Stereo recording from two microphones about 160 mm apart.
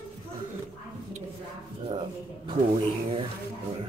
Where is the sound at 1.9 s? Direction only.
40° right (ahead or behind).